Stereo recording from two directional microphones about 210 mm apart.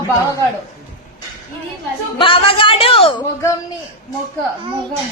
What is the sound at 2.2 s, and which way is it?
Speech, 25° left (ahead or behind).